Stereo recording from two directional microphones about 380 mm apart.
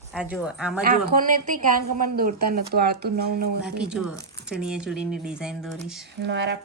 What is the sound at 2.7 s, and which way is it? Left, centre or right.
Speech, right.